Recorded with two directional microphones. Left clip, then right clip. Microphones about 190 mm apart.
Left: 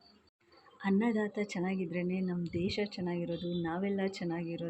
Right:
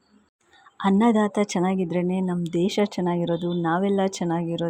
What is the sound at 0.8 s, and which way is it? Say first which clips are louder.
A woman's voice: right 12 dB; 30° right (ahead or behind).